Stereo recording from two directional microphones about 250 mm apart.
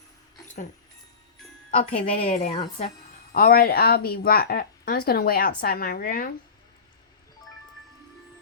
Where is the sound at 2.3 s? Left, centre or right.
Left.